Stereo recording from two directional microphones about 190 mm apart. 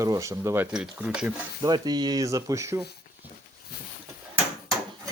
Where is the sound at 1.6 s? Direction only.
20° right (ahead or behind).